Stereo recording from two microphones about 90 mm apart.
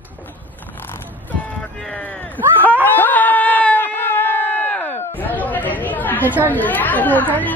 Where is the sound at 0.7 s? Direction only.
25° left (ahead or behind).